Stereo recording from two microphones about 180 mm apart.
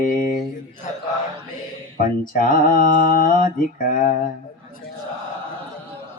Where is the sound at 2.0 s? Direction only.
50° left (ahead or behind).